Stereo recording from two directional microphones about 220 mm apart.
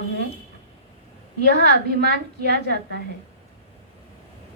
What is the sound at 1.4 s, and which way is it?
A woman's voice, 50° right (ahead or behind).